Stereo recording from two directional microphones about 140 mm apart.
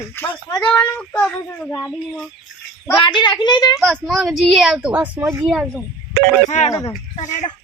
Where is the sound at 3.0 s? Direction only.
35° left (ahead or behind).